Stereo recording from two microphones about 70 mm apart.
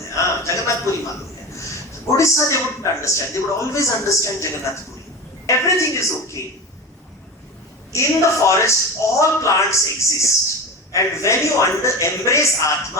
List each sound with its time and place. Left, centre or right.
0.4 s a sound: left
1.5 s speech: left
7.9 s speech: left